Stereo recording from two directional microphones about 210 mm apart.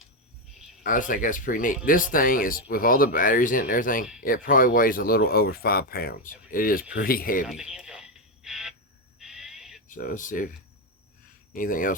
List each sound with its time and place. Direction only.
0.8 s speech: 40° left (ahead or behind)
7.4 s radio: centre (ahead or behind)
9.1 s owl: centre (ahead or behind)
9.9 s speech: 40° left (ahead or behind)
11.5 s speech: 40° left (ahead or behind)